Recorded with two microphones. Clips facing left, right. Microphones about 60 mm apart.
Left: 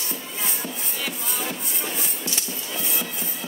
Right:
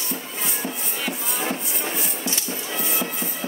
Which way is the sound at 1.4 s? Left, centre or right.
Right.